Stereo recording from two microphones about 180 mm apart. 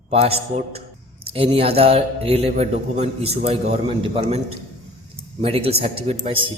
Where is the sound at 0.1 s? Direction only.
35° right (ahead or behind).